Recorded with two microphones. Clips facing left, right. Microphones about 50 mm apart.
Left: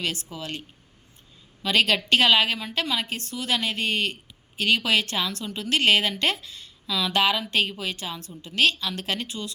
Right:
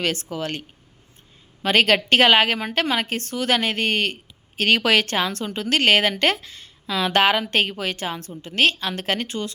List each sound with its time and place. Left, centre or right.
0.0 s a woman's voice: right
1.6 s a woman's voice: right